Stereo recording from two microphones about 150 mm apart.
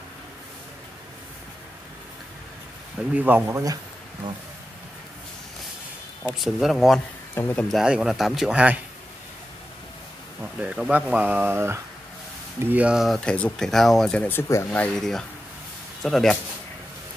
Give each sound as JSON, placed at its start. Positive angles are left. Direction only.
{"t": 3.2, "sound": "speech", "side_deg": -10}
{"t": 6.3, "sound": "speech", "side_deg": 0}
{"t": 7.3, "sound": "speech", "side_deg": 15}
{"t": 7.6, "sound": "speech", "side_deg": -5}
{"t": 10.4, "sound": "speech", "side_deg": -10}